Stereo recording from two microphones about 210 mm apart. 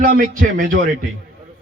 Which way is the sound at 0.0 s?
40° right (ahead or behind).